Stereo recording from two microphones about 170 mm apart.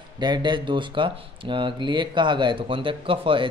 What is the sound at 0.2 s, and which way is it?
Speech, 25° right (ahead or behind).